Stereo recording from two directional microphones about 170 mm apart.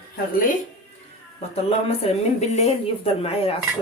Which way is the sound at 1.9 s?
35° left (ahead or behind).